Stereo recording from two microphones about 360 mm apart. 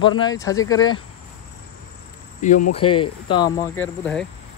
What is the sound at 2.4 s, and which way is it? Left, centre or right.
Speech, left.